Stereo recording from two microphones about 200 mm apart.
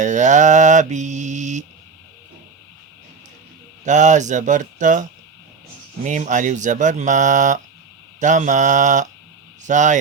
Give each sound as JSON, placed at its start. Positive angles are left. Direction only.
{"t": 0.0, "sound": "mantra", "side_deg": -35}
{"t": 3.8, "sound": "speech", "side_deg": -35}
{"t": 6.1, "sound": "speech", "side_deg": -40}